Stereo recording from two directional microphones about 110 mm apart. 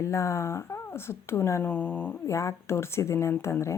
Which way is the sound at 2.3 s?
25° left (ahead or behind).